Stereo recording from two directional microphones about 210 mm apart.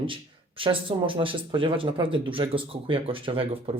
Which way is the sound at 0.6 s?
25° right (ahead or behind).